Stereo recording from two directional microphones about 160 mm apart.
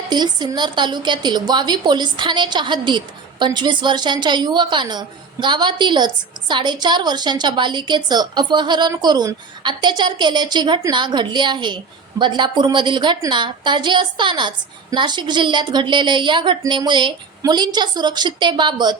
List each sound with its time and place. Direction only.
0.1 s a woman's voice: 25° right (ahead or behind)